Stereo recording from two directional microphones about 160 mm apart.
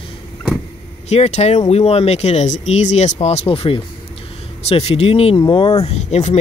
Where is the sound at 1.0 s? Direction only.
40° left (ahead or behind).